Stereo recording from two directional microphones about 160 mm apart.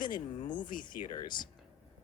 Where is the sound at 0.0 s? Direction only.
30° left (ahead or behind).